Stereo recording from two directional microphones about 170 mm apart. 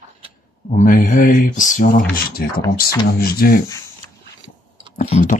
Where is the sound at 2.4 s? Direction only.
60° left (ahead or behind).